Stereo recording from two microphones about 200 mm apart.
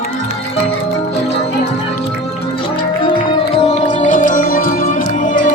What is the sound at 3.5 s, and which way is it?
Music, 30° left (ahead or behind).